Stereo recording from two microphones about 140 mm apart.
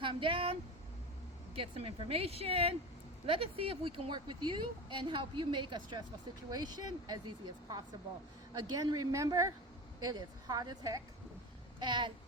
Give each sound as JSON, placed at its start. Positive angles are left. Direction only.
{"t": 0.0, "sound": "speech", "side_deg": -40}
{"t": 1.5, "sound": "speech", "side_deg": -45}